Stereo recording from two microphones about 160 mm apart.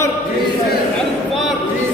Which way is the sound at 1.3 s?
Centre (ahead or behind).